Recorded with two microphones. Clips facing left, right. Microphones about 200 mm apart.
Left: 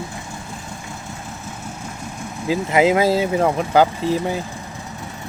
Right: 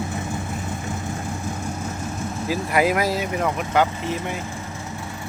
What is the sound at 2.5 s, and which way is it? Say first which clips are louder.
Speech: left 5 dB; 20° left (ahead or behind).